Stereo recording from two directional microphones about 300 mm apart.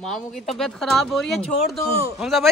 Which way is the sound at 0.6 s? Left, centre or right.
Centre.